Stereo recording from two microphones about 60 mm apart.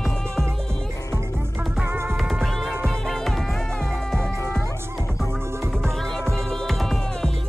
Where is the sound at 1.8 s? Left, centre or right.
Right.